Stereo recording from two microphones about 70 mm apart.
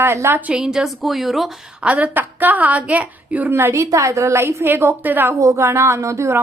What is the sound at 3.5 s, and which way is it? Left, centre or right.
Speech, right.